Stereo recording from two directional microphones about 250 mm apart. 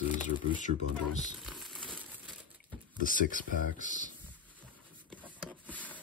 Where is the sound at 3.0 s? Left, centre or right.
Left.